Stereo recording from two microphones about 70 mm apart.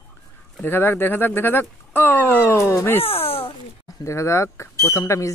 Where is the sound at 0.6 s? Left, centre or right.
Left.